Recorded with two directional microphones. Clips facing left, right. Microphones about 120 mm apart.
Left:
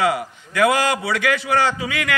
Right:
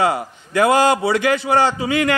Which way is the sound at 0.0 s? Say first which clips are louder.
Right 2 dB; 30° right (ahead or behind).